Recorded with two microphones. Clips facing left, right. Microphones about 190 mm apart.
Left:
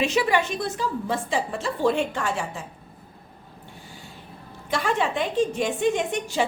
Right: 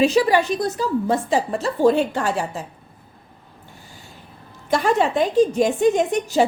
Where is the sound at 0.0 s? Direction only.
35° right (ahead or behind).